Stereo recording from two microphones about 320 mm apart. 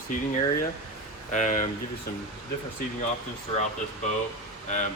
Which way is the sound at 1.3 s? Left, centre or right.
Left.